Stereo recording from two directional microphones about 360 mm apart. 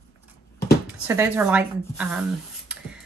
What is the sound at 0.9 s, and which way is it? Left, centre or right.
A woman's voice, centre.